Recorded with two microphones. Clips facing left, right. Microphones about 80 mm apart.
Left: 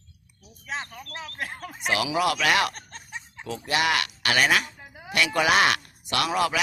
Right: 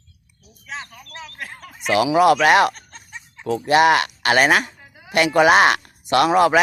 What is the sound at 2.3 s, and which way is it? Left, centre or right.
Speech, right.